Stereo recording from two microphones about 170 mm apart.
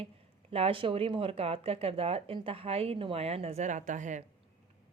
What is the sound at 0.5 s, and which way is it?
A woman's voice, 35° right (ahead or behind).